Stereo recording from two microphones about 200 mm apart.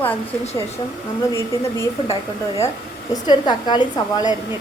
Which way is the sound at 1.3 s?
15° left (ahead or behind).